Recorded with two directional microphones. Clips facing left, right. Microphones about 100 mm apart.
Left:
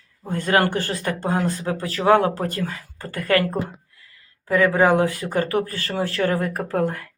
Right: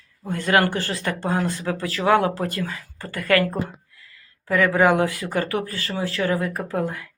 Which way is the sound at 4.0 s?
30° left (ahead or behind).